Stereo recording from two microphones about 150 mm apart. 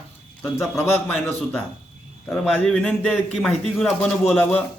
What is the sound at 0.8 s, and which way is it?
Speech, 15° left (ahead or behind).